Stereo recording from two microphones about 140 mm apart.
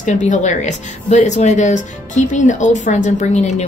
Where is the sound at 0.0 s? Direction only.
60° left (ahead or behind).